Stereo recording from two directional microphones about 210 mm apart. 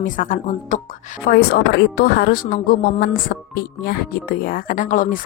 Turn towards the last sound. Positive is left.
turn(degrees=40)  # may be behind; listen again after turning